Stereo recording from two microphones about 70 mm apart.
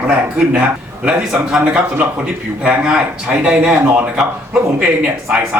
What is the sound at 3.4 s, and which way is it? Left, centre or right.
Speech, centre.